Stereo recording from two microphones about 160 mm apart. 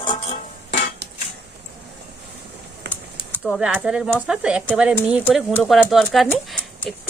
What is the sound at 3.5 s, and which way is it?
Speech, 5° right (ahead or behind).